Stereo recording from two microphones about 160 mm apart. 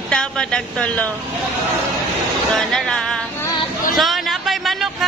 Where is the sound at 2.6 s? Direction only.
Centre (ahead or behind).